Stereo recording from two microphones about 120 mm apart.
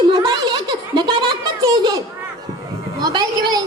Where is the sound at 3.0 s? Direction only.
35° right (ahead or behind).